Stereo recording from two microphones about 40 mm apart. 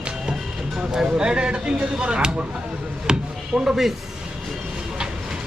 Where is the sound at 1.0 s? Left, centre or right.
Right.